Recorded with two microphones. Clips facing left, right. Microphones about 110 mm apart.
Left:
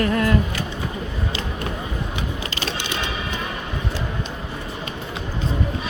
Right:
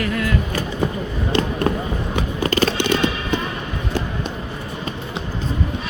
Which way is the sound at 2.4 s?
50° right (ahead or behind).